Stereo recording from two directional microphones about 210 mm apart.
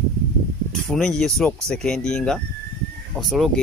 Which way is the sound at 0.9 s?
Centre (ahead or behind).